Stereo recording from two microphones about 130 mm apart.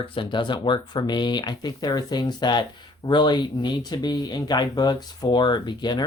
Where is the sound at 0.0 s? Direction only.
40° left (ahead or behind).